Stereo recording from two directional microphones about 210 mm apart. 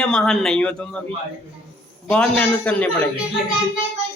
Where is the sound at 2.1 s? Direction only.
5° left (ahead or behind).